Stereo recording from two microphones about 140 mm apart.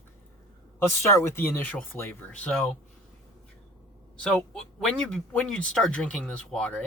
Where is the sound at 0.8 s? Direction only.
20° left (ahead or behind).